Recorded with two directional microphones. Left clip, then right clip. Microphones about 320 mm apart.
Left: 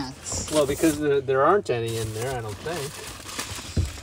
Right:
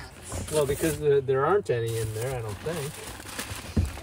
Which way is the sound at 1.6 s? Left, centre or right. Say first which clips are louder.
Left 1 dB; centre.